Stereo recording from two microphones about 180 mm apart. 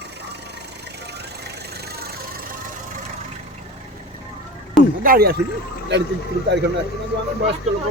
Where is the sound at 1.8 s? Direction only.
60° right (ahead or behind).